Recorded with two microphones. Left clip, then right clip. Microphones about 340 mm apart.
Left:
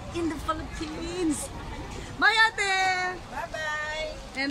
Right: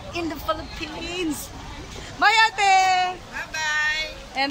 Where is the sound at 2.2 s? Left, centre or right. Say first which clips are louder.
Right 5 dB; centre.